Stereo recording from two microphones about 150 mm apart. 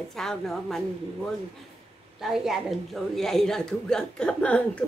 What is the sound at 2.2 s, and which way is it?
A woman's voice, centre (ahead or behind).